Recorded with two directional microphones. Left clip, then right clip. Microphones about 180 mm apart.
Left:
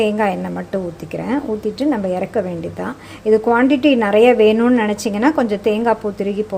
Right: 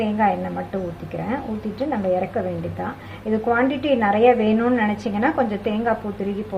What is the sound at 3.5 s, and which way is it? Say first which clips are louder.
A woman's voice: left 6 dB; 55° left (ahead or behind).